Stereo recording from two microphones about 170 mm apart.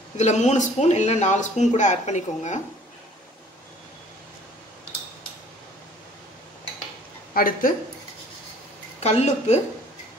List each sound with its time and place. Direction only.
0.2 s speech: 40° left (ahead or behind)
7.3 s speech: 55° left (ahead or behind)
9.0 s speech: 40° left (ahead or behind)